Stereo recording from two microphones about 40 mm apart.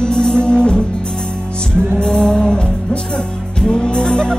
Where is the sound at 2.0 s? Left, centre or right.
Centre.